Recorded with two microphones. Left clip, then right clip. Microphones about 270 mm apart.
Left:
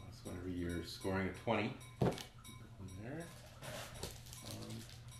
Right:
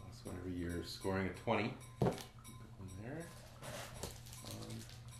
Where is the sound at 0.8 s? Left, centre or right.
Centre.